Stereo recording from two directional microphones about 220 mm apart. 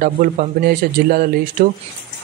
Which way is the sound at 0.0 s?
40° right (ahead or behind).